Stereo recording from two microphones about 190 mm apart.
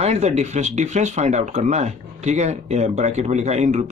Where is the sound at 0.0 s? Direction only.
35° right (ahead or behind).